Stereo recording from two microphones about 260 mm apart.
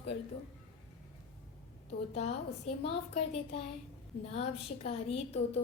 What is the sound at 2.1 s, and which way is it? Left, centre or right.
A woman's voice, left.